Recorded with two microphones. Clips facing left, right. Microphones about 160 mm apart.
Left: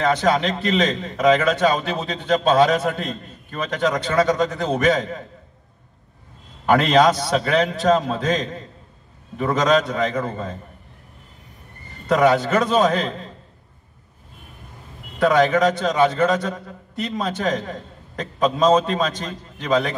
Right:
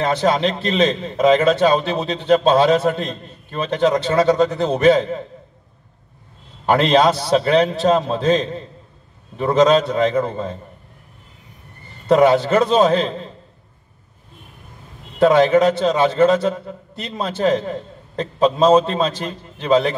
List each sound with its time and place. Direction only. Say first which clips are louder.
0.0 s a man's voice: right 1 dB; 30° right (ahead or behind)
6.6 s a man's voice: right 1 dB; 30° right (ahead or behind)
12.1 s a man's voice: right 3 dB; 30° right (ahead or behind)
15.1 s a man's voice: right 4 dB; 30° right (ahead or behind)